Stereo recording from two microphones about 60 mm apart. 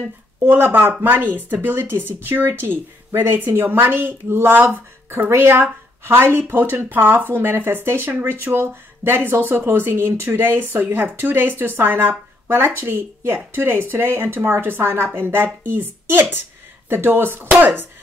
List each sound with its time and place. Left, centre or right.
0.4 s speech: right